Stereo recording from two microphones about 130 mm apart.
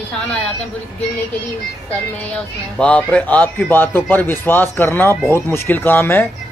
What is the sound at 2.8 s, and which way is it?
A man's voice, 10° left (ahead or behind).